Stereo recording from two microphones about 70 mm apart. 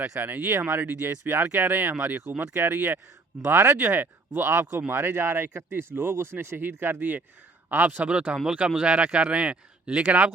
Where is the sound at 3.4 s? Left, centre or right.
Right.